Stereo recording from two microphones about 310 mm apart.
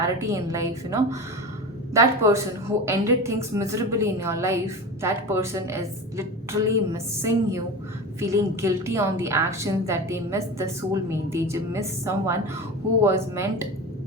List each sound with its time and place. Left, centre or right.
0.2 s a woman's voice: centre